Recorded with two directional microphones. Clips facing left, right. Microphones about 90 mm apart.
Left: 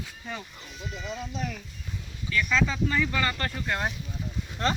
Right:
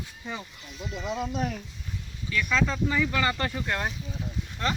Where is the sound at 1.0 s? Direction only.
55° right (ahead or behind).